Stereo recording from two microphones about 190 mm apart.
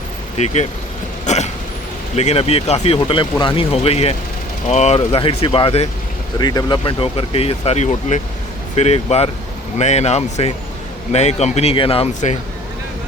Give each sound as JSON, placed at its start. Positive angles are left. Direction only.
{"t": 0.3, "sound": "speech", "side_deg": 35}
{"t": 1.2, "sound": "throat clearing", "side_deg": 35}
{"t": 2.1, "sound": "speech", "side_deg": 35}